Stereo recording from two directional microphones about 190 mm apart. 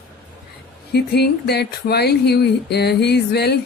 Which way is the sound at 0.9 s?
60° left (ahead or behind).